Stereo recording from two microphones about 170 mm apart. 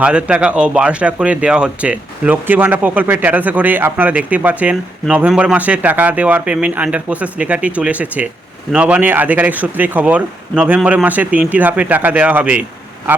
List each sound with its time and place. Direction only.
0.0 s speech: 5° right (ahead or behind)